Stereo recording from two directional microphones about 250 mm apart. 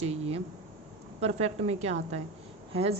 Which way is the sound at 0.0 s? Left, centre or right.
Right.